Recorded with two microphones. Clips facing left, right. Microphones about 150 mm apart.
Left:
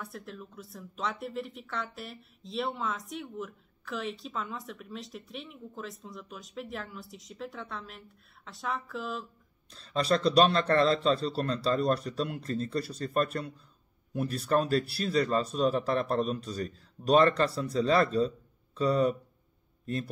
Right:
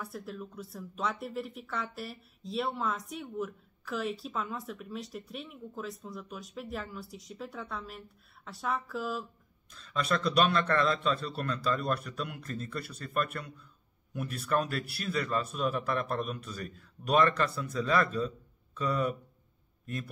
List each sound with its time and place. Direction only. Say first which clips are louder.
0.0 s speech: right 2 dB; centre (ahead or behind)
9.7 s speech: left 4 dB; 35° left (ahead or behind)